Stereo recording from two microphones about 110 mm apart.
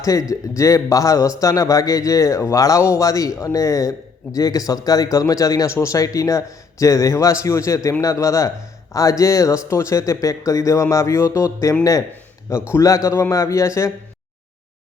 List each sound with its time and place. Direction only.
0.0 s speech: 30° left (ahead or behind)